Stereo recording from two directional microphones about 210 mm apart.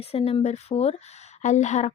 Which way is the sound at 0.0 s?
30° left (ahead or behind).